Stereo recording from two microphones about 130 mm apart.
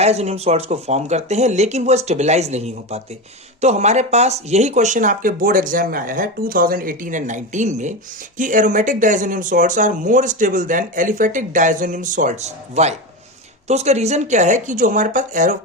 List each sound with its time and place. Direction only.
0.0 s speech: 55° right (ahead or behind)
8.4 s speech: 85° right